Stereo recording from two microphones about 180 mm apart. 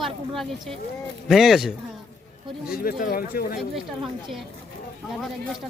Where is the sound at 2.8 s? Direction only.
55° left (ahead or behind).